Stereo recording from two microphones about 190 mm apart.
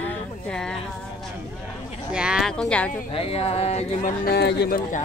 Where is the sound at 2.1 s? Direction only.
5° right (ahead or behind).